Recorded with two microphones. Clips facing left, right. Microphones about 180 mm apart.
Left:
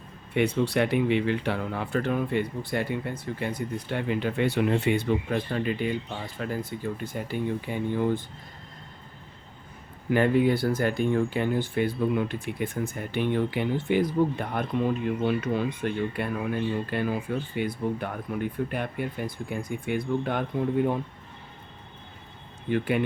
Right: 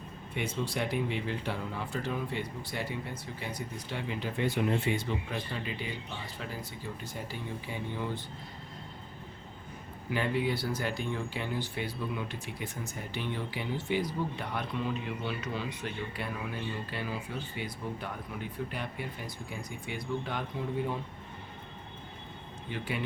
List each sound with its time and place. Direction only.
0.3 s speech: 65° left (ahead or behind)
10.1 s speech: 50° left (ahead or behind)
22.7 s speech: 55° left (ahead or behind)